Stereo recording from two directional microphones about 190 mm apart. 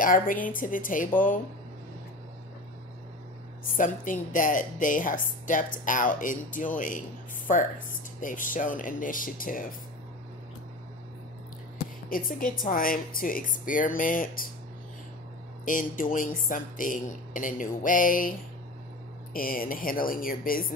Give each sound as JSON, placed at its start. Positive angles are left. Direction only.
{"t": 0.0, "sound": "a woman's voice", "side_deg": 45}
{"t": 3.6, "sound": "a woman's voice", "side_deg": 45}
{"t": 12.1, "sound": "a woman's voice", "side_deg": 45}
{"t": 15.6, "sound": "a woman's voice", "side_deg": 45}
{"t": 19.3, "sound": "a woman's voice", "side_deg": 50}